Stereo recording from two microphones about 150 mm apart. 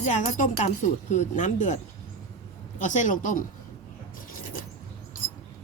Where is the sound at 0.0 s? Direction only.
55° left (ahead or behind).